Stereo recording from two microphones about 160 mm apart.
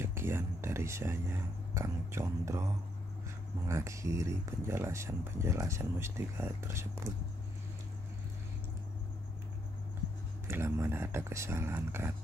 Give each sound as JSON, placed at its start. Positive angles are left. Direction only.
{"t": 0.0, "sound": "speech", "side_deg": -15}
{"t": 10.5, "sound": "speech", "side_deg": -15}